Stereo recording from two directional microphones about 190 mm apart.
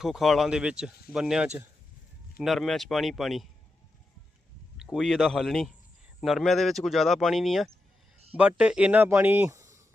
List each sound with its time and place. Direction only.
0.0 s speech: centre (ahead or behind)
4.8 s speech: centre (ahead or behind)